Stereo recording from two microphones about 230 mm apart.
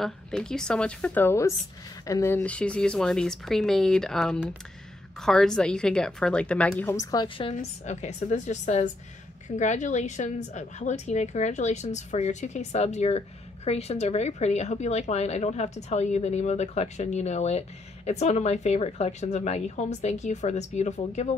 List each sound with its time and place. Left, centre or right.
0.0 s speech: centre
7.5 s a woman's voice: left